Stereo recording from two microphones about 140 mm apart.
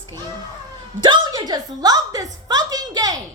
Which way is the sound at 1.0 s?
30° right (ahead or behind).